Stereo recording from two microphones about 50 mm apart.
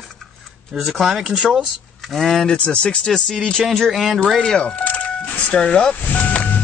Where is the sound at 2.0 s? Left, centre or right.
Centre.